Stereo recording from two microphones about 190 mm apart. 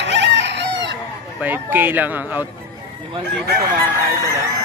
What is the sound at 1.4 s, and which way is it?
Speech, 10° right (ahead or behind).